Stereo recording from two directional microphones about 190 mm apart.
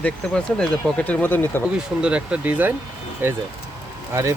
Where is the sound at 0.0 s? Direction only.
5° left (ahead or behind).